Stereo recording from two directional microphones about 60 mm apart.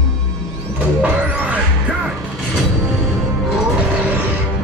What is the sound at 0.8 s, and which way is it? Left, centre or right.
Music, right.